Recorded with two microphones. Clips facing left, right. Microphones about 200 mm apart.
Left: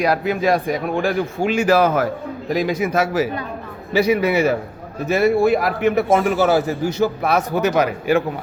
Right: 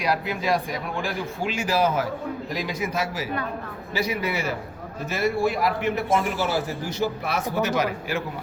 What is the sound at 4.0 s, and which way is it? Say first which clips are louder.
A man's voice: left 10 dB; 65° left (ahead or behind).